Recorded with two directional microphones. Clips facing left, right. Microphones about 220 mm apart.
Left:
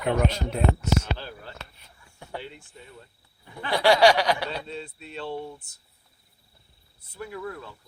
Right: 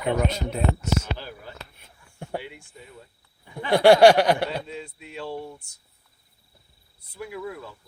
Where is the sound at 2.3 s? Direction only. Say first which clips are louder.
Right 4 dB; 10° right (ahead or behind).